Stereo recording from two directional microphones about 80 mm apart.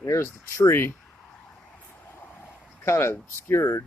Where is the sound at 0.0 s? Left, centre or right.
Left.